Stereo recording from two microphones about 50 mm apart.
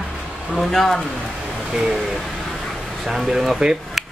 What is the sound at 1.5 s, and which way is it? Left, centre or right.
Speech, centre.